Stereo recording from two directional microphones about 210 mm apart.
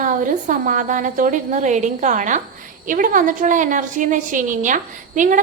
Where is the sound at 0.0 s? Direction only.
40° right (ahead or behind).